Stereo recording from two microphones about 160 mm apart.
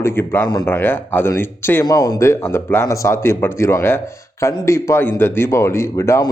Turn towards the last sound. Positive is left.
turn(degrees=20)  # may be behind; listen again after turning